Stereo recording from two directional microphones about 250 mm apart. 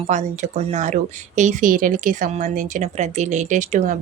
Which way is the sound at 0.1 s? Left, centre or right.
Right.